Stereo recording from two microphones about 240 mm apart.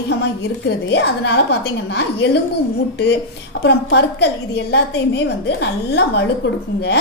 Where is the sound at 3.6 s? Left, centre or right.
Left.